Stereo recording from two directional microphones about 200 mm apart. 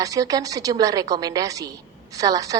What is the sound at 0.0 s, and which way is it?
A woman's voice, 15° right (ahead or behind).